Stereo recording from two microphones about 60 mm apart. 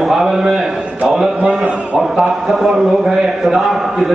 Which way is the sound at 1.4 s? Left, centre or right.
Right.